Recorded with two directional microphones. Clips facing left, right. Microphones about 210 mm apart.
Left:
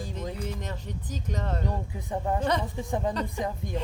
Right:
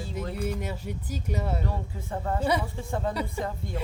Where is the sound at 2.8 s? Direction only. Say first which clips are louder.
Left 1 dB; 15° left (ahead or behind).